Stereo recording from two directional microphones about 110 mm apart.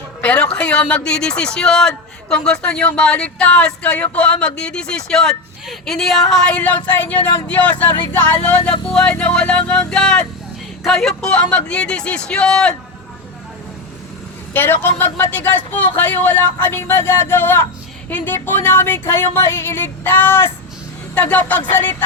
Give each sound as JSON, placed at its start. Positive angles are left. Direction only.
{"t": 0.2, "sound": "speech", "side_deg": 10}
{"t": 14.5, "sound": "speech", "side_deg": 20}
{"t": 18.4, "sound": "a sound", "side_deg": 20}
{"t": 21.2, "sound": "speech", "side_deg": 15}